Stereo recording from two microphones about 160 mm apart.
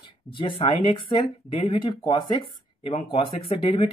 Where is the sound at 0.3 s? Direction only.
35° left (ahead or behind).